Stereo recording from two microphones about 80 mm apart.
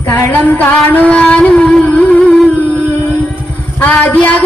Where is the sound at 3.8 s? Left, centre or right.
Left.